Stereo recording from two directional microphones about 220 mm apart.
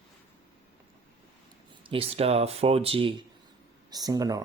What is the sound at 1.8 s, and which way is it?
Speech, 25° right (ahead or behind).